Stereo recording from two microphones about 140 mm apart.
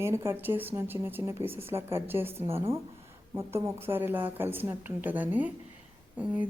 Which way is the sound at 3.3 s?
20° right (ahead or behind).